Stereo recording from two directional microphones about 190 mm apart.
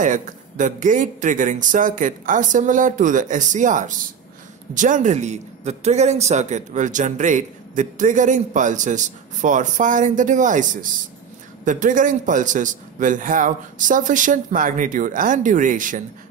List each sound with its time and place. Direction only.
0.0 s a man's voice: 40° right (ahead or behind)